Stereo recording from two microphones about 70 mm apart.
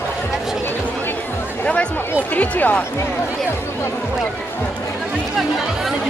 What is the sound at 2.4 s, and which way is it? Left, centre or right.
Speech, left.